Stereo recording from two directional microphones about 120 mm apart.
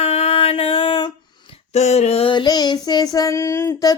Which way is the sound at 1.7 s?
65° left (ahead or behind).